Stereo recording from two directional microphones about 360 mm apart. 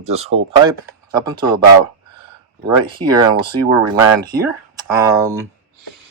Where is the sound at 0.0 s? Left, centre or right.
Centre.